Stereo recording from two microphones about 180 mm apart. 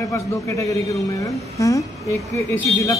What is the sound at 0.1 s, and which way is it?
A man's voice, 15° left (ahead or behind).